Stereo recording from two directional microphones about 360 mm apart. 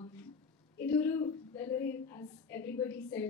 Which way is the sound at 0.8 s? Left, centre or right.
Centre.